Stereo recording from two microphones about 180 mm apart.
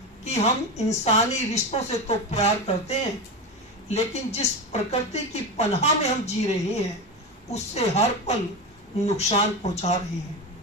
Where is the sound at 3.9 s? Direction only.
35° left (ahead or behind).